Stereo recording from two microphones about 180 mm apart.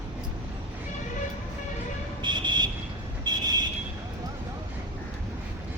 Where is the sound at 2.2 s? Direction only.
25° right (ahead or behind).